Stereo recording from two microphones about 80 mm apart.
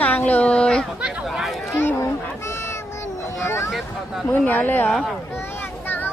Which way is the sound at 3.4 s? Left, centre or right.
Left.